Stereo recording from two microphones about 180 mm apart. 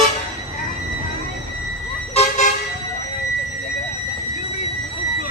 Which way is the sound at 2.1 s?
35° left (ahead or behind).